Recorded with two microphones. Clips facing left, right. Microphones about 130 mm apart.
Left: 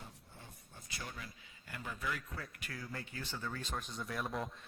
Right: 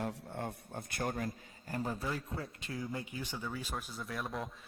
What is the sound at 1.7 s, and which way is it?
Speech, 35° right (ahead or behind).